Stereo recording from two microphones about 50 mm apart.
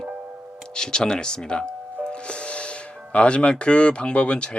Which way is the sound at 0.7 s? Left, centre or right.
Centre.